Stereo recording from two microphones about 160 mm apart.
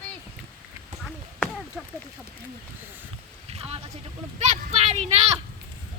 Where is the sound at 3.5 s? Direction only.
40° right (ahead or behind).